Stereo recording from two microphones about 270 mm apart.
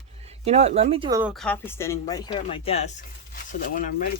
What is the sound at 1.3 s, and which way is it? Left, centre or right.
Speech, centre.